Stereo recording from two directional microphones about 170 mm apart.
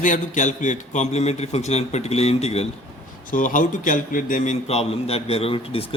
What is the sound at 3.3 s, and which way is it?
A man's voice, 50° left (ahead or behind).